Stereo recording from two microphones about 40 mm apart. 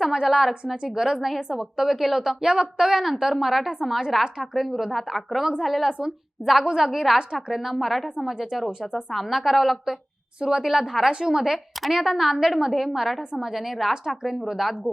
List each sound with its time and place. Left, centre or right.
0.0 s a woman's voice: centre
10.4 s a woman's voice: centre